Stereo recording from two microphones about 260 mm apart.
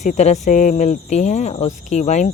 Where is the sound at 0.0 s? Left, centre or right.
Left.